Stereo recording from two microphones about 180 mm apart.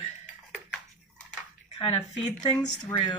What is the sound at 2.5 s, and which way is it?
Speech, 5° left (ahead or behind).